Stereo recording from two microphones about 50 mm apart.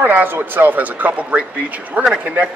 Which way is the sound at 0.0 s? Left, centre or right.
Right.